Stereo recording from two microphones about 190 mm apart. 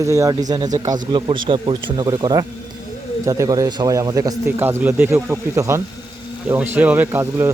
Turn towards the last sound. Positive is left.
turn(degrees=-10)  # may be behind; listen again after turning